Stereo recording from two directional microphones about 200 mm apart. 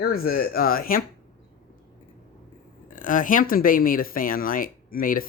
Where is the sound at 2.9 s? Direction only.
40° left (ahead or behind).